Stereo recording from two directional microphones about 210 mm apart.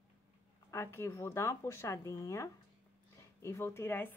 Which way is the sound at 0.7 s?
10° left (ahead or behind).